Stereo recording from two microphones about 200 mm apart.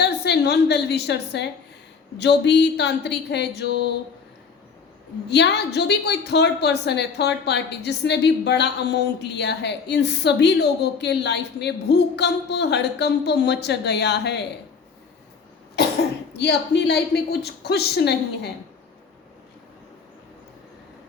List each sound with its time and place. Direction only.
0.0 s a woman's voice: 55° left (ahead or behind)
5.3 s a woman's voice: 60° left (ahead or behind)
16.3 s a woman's voice: 55° left (ahead or behind)